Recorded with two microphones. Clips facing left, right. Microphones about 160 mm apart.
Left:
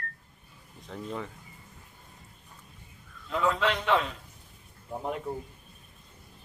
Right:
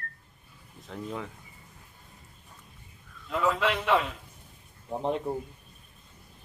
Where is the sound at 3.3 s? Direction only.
Centre (ahead or behind).